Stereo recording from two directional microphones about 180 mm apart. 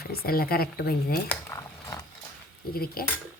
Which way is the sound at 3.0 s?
55° left (ahead or behind).